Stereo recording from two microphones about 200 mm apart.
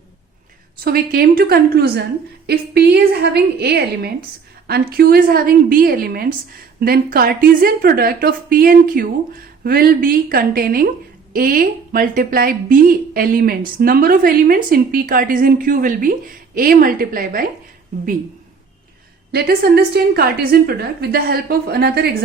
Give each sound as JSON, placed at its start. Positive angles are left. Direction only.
{"t": 0.9, "sound": "a woman's voice", "side_deg": -50}
{"t": 19.3, "sound": "a woman's voice", "side_deg": -50}